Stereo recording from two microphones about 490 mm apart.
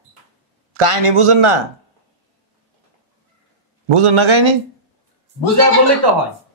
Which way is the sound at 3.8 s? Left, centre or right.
Right.